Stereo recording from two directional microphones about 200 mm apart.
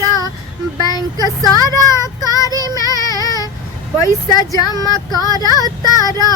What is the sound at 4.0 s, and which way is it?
Speech, 20° left (ahead or behind).